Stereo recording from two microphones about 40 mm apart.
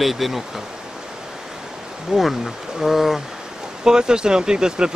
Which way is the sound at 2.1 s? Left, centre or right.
Centre.